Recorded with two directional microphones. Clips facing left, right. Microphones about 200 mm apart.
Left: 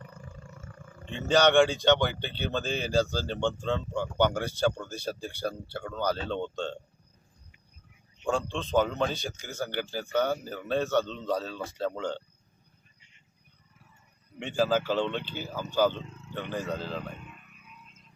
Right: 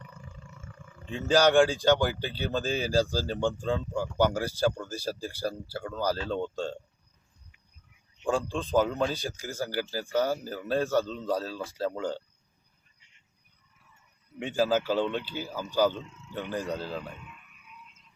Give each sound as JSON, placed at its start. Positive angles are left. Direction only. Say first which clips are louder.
{"t": 0.0, "sound": "roar", "louder": "left 2 dB", "side_deg": 40}
{"t": 1.1, "sound": "speech", "louder": "even", "side_deg": -10}
{"t": 8.5, "sound": "speech", "louder": "even", "side_deg": -10}
{"t": 14.3, "sound": "speech", "louder": "even", "side_deg": -10}
{"t": 16.0, "sound": "speech", "louder": "left 3 dB", "side_deg": 35}
{"t": 16.4, "sound": "speech", "louder": "right 1 dB", "side_deg": -10}